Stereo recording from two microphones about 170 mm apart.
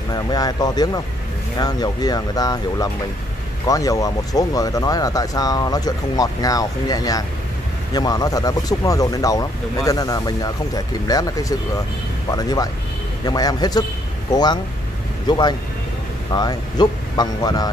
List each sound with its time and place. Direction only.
0.1 s speech: 25° left (ahead or behind)